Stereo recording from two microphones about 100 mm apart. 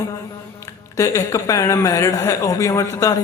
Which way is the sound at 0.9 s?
35° left (ahead or behind).